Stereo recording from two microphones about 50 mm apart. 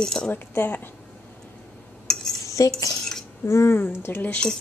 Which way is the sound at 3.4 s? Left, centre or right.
Left.